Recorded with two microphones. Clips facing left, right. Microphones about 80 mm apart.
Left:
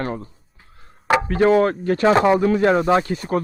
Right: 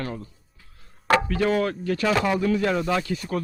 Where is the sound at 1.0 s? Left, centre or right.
Centre.